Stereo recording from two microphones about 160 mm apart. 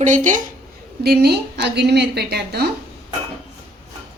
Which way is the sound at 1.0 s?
90° right.